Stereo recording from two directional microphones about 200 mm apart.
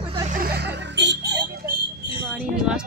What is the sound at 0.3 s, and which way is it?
Music, 50° right (ahead or behind).